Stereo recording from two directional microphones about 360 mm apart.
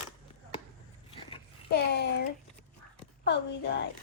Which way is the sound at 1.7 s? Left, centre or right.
Left.